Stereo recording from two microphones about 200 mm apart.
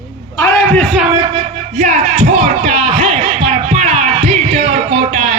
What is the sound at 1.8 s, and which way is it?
Music, 35° right (ahead or behind).